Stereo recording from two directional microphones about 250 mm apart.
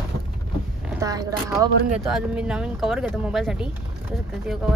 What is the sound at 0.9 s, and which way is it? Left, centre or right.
Speech, centre.